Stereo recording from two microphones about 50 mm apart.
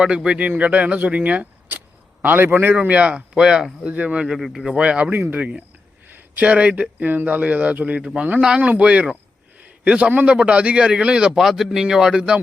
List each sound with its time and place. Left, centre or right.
0.0 s speech: centre
2.2 s a man's voice: right
2.7 s speech: right
3.4 s speech: centre
3.8 s speech: right
4.3 s speech: centre
4.6 s speech: centre
5.1 s speech: right
6.1 s a sound: right
6.4 s speech: right
8.7 s a man's voice: right
11.3 s speech: centre